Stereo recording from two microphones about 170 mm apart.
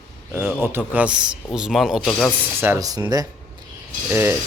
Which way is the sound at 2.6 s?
15° right (ahead or behind).